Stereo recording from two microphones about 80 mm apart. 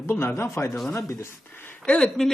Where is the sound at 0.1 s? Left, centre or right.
Left.